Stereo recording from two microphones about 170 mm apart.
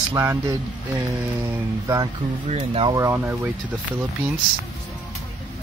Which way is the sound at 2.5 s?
35° right (ahead or behind).